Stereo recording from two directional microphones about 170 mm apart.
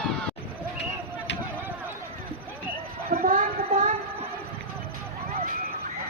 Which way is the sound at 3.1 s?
55° right (ahead or behind).